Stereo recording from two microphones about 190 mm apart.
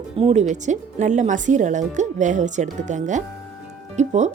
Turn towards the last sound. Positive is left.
turn(degrees=-40)  # may be behind; listen again after turning